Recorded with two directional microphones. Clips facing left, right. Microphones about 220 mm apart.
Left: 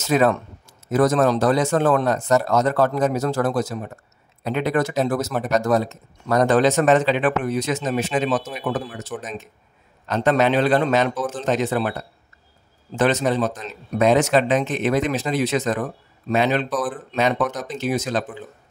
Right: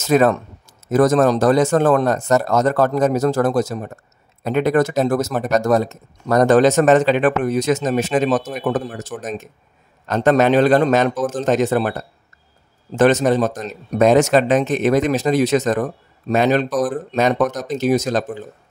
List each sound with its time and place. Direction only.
0.0 s speech: 45° right (ahead or behind)